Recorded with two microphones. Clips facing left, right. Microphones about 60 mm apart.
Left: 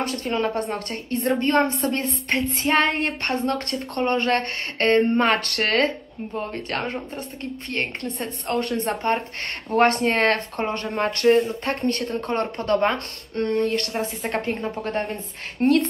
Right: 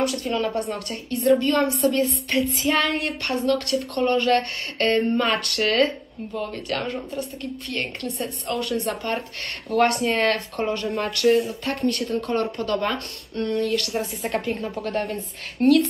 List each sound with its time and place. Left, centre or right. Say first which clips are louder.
0.0 s speech: right 1 dB; left
12.4 s speech: left 5 dB; left
14.6 s speech: even; left